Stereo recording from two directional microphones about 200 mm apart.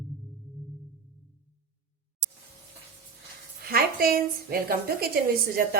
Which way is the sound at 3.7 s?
50° right (ahead or behind).